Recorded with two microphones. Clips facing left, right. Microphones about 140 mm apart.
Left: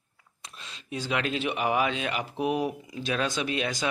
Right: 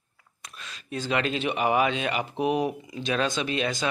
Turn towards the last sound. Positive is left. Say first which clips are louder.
# right 2 dB
turn(degrees=10)  # may be behind; listen again after turning